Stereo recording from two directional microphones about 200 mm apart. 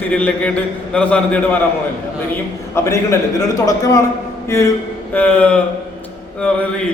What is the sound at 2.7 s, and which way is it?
A man's voice, 15° left (ahead or behind).